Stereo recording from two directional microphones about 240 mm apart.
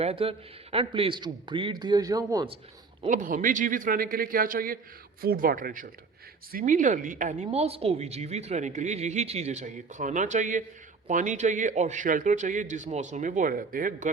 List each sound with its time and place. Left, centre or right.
0.0 s a woman's voice: right
3.1 s a man's voice: right